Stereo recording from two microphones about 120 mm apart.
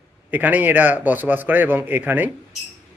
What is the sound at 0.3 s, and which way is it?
A man's voice, 15° right (ahead or behind).